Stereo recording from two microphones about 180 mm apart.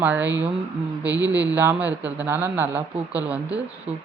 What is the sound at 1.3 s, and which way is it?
Speech, 10° right (ahead or behind).